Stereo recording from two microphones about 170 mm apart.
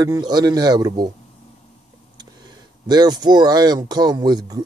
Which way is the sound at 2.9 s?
25° right (ahead or behind).